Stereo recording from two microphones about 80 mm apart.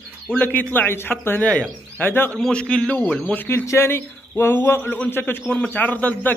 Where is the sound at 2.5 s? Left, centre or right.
Centre.